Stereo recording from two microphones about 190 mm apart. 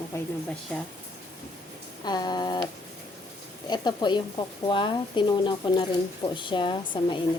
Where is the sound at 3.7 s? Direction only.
20° left (ahead or behind).